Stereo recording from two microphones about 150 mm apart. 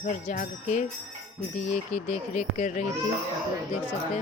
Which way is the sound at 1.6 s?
50° left (ahead or behind).